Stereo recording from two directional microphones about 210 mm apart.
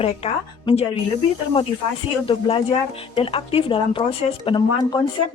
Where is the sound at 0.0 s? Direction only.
30° left (ahead or behind).